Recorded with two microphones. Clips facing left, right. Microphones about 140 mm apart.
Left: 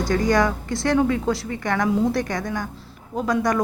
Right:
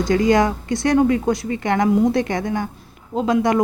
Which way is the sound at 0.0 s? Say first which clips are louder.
Right 3 dB; 20° right (ahead or behind).